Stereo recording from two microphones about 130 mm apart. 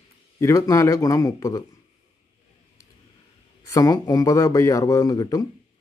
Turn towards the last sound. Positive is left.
turn(degrees=30)  # may be behind; listen again after turning